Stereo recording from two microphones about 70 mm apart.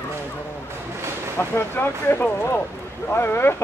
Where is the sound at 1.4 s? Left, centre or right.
Left.